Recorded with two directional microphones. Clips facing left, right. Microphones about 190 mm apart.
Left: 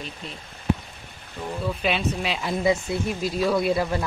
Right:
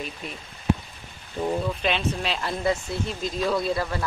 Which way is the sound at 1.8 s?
5° left (ahead or behind).